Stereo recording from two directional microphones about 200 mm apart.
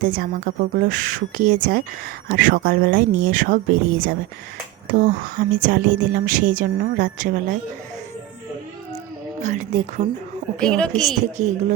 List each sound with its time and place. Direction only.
0.0 s a woman's voice: 45° right (ahead or behind)
9.4 s a woman's voice: 35° right (ahead or behind)
10.6 s a woman's voice: 5° left (ahead or behind)
11.4 s a woman's voice: 35° right (ahead or behind)